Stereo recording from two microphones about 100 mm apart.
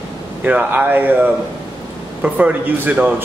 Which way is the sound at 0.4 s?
15° right (ahead or behind).